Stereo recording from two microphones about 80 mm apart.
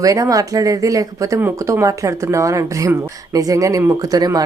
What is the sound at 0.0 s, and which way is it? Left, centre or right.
Speech, right.